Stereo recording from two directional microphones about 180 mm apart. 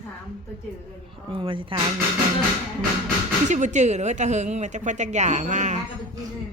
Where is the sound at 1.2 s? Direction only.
25° right (ahead or behind).